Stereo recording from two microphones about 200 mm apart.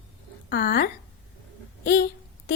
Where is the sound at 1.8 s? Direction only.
55° left (ahead or behind).